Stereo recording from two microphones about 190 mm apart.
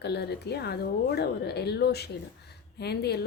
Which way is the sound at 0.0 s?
60° left (ahead or behind).